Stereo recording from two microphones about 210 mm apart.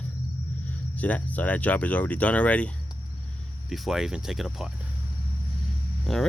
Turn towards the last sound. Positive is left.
turn(degrees=0)  # may be behind; listen again after turning